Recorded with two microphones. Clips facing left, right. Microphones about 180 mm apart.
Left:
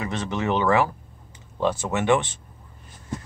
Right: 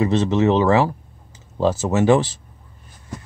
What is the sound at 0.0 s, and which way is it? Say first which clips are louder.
Speech: right 10 dB; 25° right (ahead or behind).